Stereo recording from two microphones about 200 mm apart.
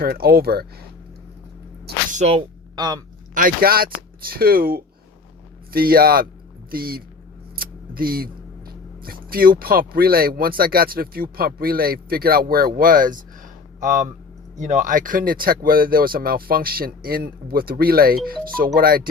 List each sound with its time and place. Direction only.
0.0 s speech: 50° right (ahead or behind)
2.1 s speech: 30° right (ahead or behind)
2.7 s a sound: 20° right (ahead or behind)
3.3 s speech: 45° right (ahead or behind)